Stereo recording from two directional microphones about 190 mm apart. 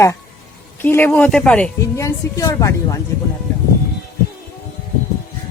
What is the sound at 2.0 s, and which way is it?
Speech, 15° left (ahead or behind).